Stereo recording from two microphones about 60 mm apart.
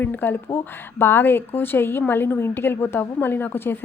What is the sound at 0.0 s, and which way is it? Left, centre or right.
A woman's voice, left.